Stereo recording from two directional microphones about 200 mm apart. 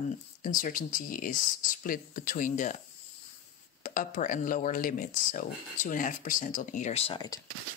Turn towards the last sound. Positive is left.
turn(degrees=20)  # may be behind; listen again after turning